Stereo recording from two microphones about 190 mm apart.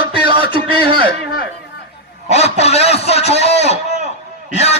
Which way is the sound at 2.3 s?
35° left (ahead or behind).